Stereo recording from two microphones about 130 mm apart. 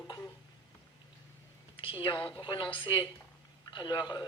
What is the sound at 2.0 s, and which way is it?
Speech, 35° left (ahead or behind).